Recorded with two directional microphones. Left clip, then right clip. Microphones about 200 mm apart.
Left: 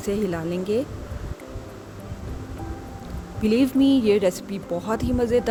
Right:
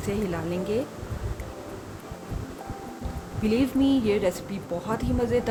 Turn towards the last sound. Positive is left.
turn(degrees=40)  # may be behind; listen again after turning